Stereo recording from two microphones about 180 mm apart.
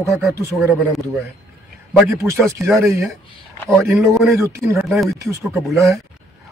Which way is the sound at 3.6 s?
Centre (ahead or behind).